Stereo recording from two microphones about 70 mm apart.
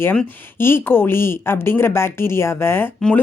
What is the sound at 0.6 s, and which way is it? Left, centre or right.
Speech, left.